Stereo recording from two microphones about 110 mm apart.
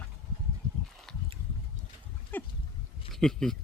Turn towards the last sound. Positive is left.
turn(degrees=5)  # may be behind; listen again after turning